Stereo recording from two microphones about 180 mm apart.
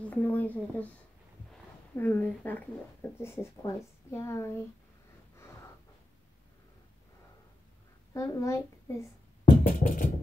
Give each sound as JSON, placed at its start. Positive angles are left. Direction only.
{"t": 0.0, "sound": "a sound", "side_deg": 10}
{"t": 2.0, "sound": "speech", "side_deg": 10}
{"t": 8.1, "sound": "a child's voice", "side_deg": 15}
{"t": 9.4, "sound": "music", "side_deg": 50}